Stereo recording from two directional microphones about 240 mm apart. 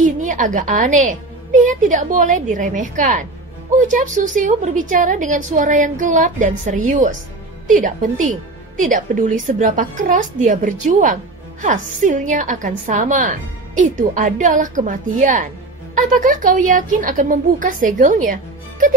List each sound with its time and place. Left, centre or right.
0.0 s a woman's voice: right